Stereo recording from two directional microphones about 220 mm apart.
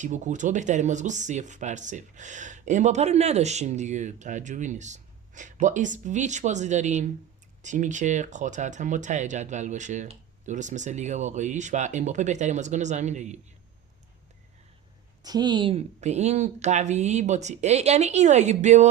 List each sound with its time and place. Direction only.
0.0 s speech: 35° right (ahead or behind)
15.2 s speech: 20° right (ahead or behind)